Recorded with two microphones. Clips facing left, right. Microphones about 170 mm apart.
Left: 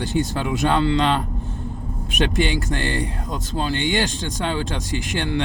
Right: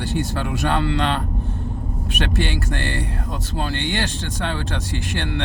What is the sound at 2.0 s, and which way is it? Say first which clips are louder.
Speech: left 3 dB; 15° left (ahead or behind).